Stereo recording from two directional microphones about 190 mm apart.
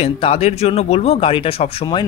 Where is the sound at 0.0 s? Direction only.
30° left (ahead or behind).